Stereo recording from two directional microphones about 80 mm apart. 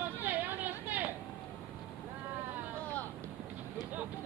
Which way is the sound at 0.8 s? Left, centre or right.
Right.